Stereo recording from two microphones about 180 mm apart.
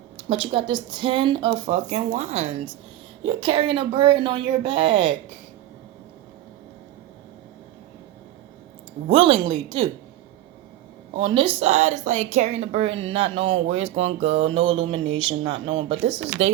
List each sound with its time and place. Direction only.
0.3 s a woman's voice: 30° right (ahead or behind)
9.0 s a woman's voice: 30° right (ahead or behind)
11.2 s a woman's voice: 30° right (ahead or behind)